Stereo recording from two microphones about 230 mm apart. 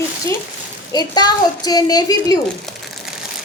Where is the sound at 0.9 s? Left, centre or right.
Centre.